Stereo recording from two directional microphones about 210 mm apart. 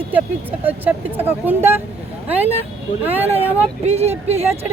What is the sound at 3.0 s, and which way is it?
Speech, 10° right (ahead or behind).